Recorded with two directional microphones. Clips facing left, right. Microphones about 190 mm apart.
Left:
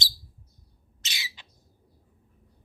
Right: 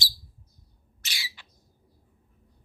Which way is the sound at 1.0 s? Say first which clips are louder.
Left 1 dB; 20° left (ahead or behind).